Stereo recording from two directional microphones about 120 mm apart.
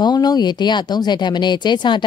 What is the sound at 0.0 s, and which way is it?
Speech, 35° left (ahead or behind).